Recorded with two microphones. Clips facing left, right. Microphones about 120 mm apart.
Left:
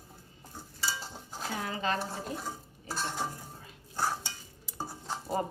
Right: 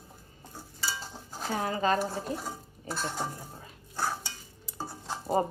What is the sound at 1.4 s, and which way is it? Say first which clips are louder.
Speech: right 5 dB; 35° right (ahead or behind).